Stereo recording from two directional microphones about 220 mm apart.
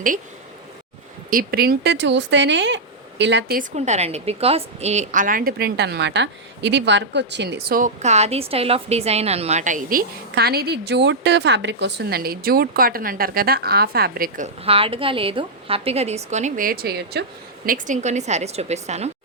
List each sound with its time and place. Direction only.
1.3 s speech: 40° right (ahead or behind)
3.6 s a woman's voice: 30° right (ahead or behind); by 17.2 s 45° right (ahead or behind)
17.7 s a woman's voice: 35° right (ahead or behind)